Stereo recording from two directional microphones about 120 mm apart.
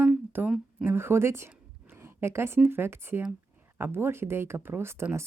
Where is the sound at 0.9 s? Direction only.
20° right (ahead or behind).